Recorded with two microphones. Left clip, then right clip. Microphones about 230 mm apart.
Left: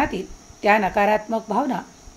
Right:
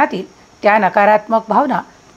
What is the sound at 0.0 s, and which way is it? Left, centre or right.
A woman's voice, centre.